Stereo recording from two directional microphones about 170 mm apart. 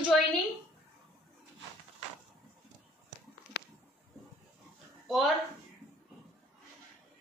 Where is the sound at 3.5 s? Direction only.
90° left.